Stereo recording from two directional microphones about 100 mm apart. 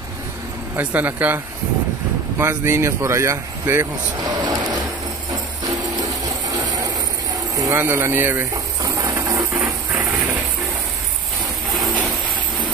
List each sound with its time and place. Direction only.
0.7 s speech: 15° right (ahead or behind)
4.2 s vehicle: 40° right (ahead or behind)
5.3 s tambourine: 40° right (ahead or behind)
7.5 s vehicle: 35° right (ahead or behind)
7.8 s speech: 20° right (ahead or behind)
8.8 s a sound: 35° right (ahead or behind)